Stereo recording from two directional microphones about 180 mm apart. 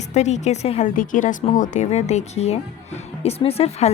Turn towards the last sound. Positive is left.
turn(degrees=35)  # may be behind; listen again after turning